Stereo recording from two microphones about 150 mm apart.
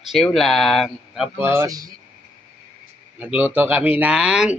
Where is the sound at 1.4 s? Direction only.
15° right (ahead or behind).